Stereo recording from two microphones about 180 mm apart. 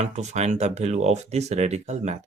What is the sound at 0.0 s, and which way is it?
Speech, 40° right (ahead or behind).